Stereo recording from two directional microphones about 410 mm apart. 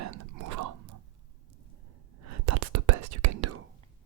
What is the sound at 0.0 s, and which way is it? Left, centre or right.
Whispering, right.